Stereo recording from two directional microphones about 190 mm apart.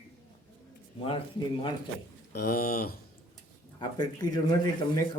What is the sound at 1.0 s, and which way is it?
Speech, 30° left (ahead or behind).